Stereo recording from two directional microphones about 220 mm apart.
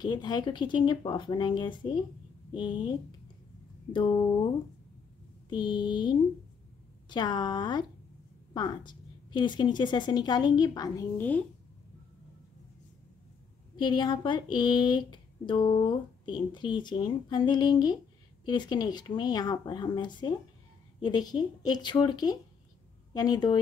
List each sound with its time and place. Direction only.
0.0 s speech: 20° left (ahead or behind)
3.9 s speech: 20° left (ahead or behind)
5.5 s speech: 20° left (ahead or behind)
13.7 s speech: 20° left (ahead or behind)